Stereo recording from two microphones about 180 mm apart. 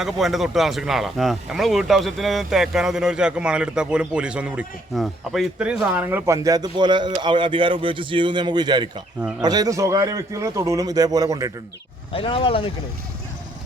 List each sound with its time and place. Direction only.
0.0 s a man's voice: centre (ahead or behind); by 11.5 s 20° right (ahead or behind)
12.1 s speech: 30° left (ahead or behind)